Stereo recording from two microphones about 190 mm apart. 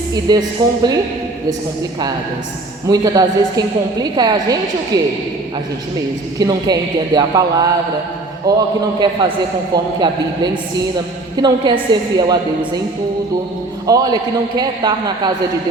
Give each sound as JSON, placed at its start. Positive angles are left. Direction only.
{"t": 0.1, "sound": "a man's voice", "side_deg": -20}
{"t": 2.9, "sound": "a man's voice", "side_deg": -20}
{"t": 6.4, "sound": "a man's voice", "side_deg": -20}
{"t": 13.8, "sound": "a man's voice", "side_deg": -20}